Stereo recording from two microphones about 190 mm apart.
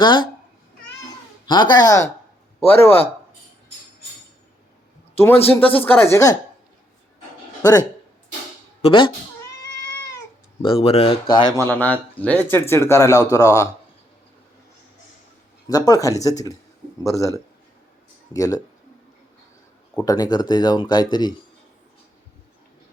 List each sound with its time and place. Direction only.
0.0 s speech: 25° left (ahead or behind)
1.5 s speech: 25° left (ahead or behind)
2.6 s a man's voice: 30° left (ahead or behind)
5.1 s a man's voice: 10° left (ahead or behind)
7.6 s speech: 20° left (ahead or behind)
10.6 s speech: 30° left (ahead or behind)
11.7 s speech: 10° left (ahead or behind)
15.6 s speech: 20° left (ahead or behind)
20.1 s speech: 20° left (ahead or behind)